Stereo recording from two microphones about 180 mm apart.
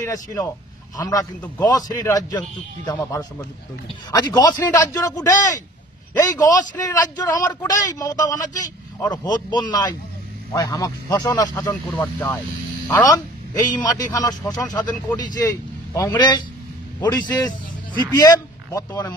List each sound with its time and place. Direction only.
0.0 s a man's voice: 20° left (ahead or behind)
12.0 s a man's voice: 10° left (ahead or behind)